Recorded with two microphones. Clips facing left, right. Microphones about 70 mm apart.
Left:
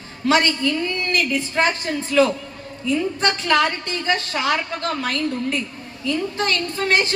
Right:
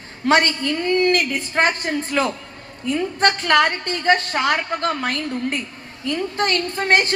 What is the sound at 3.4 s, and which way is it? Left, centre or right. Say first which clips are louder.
A woman's voice: right 2 dB; right.